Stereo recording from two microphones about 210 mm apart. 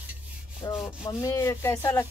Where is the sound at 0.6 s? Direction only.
20° left (ahead or behind).